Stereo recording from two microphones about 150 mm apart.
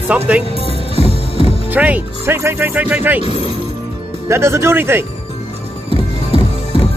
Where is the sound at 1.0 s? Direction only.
40° left (ahead or behind).